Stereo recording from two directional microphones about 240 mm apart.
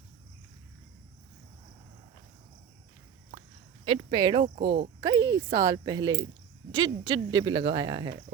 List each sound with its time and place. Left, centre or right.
3.8 s speech: centre